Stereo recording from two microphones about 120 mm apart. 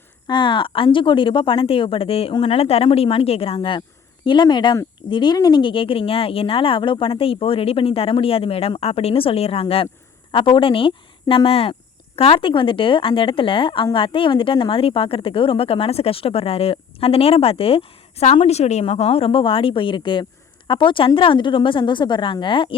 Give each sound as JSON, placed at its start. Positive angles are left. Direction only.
{"t": 0.3, "sound": "speech", "side_deg": 40}